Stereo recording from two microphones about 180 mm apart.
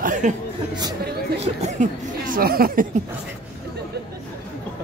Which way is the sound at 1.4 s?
40° right (ahead or behind).